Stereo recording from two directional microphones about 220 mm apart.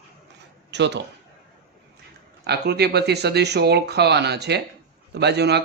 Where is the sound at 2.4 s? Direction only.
45° right (ahead or behind).